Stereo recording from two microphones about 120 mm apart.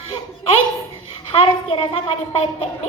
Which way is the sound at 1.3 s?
55° left (ahead or behind).